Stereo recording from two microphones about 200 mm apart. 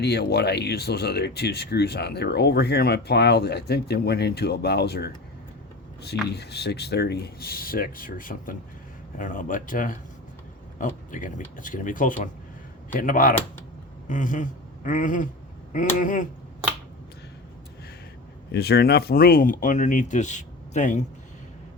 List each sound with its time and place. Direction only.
0.0 s speech: 55° left (ahead or behind)
14.1 s a sound: 40° left (ahead or behind)
16.0 s speech: 40° left (ahead or behind)
18.5 s speech: 55° left (ahead or behind); by 21.0 s 35° left (ahead or behind)